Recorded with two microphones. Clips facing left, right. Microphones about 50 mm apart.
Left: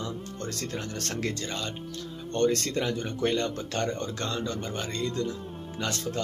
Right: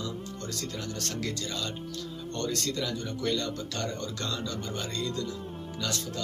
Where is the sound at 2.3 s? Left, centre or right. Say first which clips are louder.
Left 7 dB; left.